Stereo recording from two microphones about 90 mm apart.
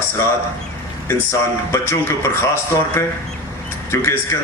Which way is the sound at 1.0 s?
30° left (ahead or behind).